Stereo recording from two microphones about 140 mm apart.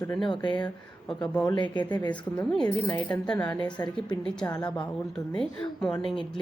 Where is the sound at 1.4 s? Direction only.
30° left (ahead or behind).